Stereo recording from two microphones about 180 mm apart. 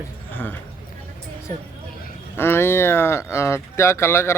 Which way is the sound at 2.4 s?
15° left (ahead or behind).